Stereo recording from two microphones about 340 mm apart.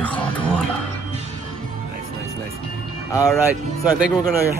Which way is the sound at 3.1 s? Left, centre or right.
Centre.